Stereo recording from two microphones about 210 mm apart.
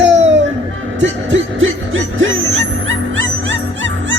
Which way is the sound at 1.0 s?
60° right (ahead or behind).